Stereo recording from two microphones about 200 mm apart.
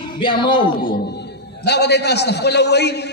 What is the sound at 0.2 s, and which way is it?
Speech, 25° left (ahead or behind).